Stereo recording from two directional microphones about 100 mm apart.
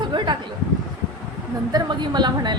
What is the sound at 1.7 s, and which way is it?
Speech, 45° right (ahead or behind).